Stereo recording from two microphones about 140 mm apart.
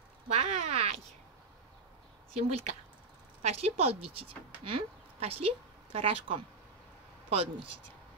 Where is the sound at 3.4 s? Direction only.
50° right (ahead or behind).